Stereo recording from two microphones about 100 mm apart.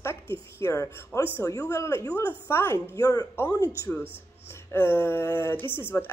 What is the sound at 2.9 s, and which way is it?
Speech, 35° left (ahead or behind).